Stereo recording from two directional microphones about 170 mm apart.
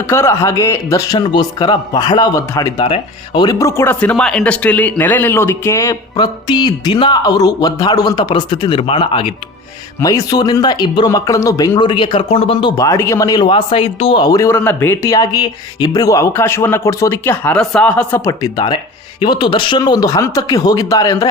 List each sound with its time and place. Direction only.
0.0 s speech: 15° left (ahead or behind)
2.8 s speech: 30° left (ahead or behind)
10.0 s speech: 20° left (ahead or behind)
18.3 s speech: 25° left (ahead or behind)